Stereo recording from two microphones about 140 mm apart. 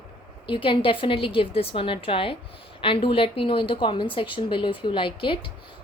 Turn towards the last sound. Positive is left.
turn(degrees=40)  # may be behind; listen again after turning